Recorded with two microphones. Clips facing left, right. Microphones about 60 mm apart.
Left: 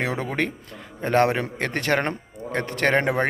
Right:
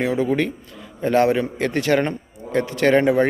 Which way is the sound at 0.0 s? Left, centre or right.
Left.